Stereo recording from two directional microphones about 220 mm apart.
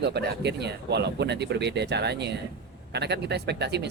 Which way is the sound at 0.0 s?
50° right (ahead or behind).